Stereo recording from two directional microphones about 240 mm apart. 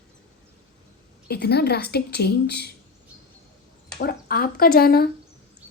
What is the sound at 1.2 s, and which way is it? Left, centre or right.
A woman's voice, left.